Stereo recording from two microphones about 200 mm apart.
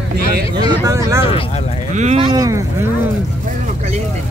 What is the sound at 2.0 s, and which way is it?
Speech, 35° right (ahead or behind).